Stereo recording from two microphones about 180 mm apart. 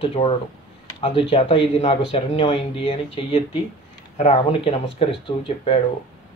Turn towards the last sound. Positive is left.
turn(degrees=30)  # may be behind; listen again after turning